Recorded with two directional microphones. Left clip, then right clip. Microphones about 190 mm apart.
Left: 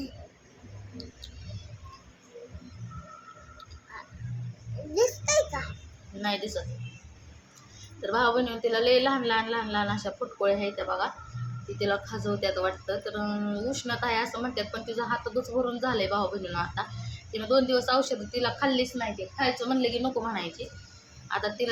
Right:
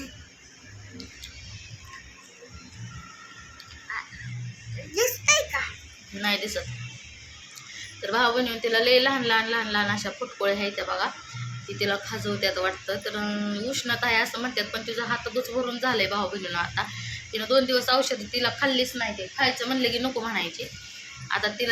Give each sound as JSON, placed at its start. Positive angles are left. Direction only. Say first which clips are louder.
{"t": 4.9, "sound": "a sound", "louder": "right 2 dB", "side_deg": 35}
{"t": 6.2, "sound": "speech", "louder": "right 4 dB", "side_deg": -5}
{"t": 8.0, "sound": "speech", "louder": "right 2 dB", "side_deg": 0}